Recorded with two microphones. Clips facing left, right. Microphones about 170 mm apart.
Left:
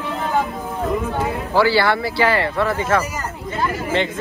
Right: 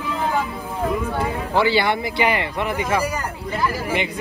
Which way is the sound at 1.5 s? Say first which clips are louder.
Left 2 dB; 20° right (ahead or behind).